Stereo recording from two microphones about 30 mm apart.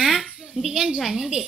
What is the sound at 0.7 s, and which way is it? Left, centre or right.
Speech, right.